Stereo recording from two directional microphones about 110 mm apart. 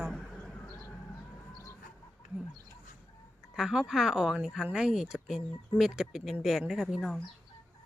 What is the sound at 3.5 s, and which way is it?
Speech, 5° right (ahead or behind).